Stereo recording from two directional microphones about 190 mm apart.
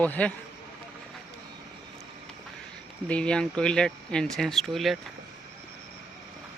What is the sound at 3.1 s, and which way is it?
Speech, 5° left (ahead or behind).